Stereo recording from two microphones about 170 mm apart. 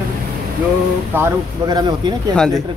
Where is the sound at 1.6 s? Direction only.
25° right (ahead or behind).